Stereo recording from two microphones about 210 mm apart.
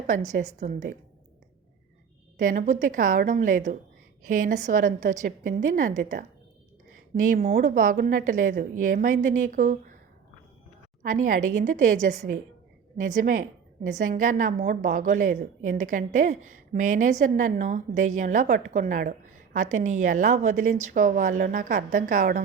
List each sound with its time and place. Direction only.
0.1 s a woman's voice: 35° right (ahead or behind)
2.4 s a woman's voice: 40° right (ahead or behind)
11.0 s a woman's voice: 40° right (ahead or behind)